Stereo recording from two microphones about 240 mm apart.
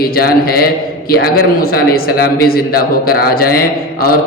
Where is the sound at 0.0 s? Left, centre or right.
Left.